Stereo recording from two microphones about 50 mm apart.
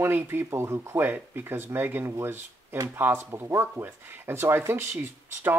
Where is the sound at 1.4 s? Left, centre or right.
Right.